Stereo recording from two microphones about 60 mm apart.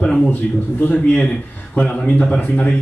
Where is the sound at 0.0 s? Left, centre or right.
Centre.